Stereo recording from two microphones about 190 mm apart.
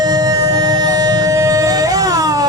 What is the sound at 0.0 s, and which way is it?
Music, 20° right (ahead or behind).